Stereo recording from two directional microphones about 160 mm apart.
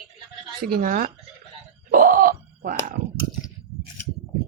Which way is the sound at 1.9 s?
60° right (ahead or behind).